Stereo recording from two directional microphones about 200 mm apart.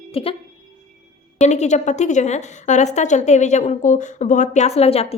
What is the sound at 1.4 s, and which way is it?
A woman's voice, 35° left (ahead or behind).